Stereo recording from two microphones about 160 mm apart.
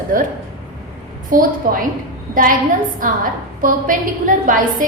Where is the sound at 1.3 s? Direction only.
60° right (ahead or behind).